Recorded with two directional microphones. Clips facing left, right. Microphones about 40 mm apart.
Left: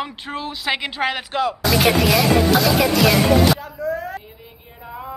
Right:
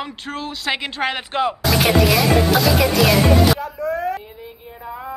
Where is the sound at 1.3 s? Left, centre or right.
Centre.